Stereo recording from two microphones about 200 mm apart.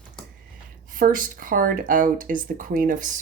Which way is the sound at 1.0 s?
45° right (ahead or behind).